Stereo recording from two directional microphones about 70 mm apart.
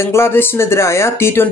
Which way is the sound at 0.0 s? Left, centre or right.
Left.